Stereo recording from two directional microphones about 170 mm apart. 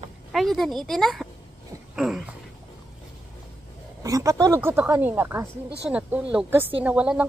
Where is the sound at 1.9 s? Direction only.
5° right (ahead or behind).